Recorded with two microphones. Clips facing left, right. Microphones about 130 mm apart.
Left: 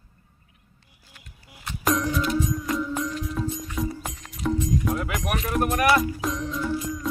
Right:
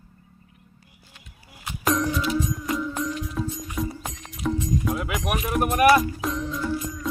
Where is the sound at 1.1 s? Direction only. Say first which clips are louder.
Left 1 dB; centre (ahead or behind).